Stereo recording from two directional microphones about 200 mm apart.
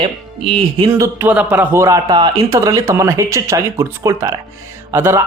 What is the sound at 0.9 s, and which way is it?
A woman's voice, 10° right (ahead or behind).